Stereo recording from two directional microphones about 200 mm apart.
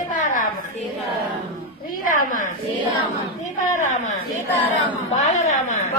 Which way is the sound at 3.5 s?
40° left (ahead or behind).